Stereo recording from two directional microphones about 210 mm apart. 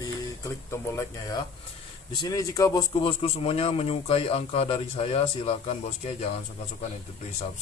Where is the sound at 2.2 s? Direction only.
15° left (ahead or behind).